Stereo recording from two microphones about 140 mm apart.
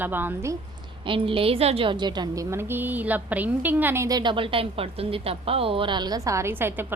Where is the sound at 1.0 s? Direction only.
40° right (ahead or behind).